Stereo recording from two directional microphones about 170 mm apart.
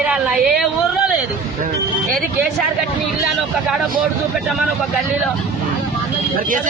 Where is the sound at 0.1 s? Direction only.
5° right (ahead or behind).